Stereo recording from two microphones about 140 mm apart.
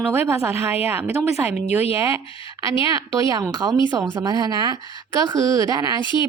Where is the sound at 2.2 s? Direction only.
40° left (ahead or behind).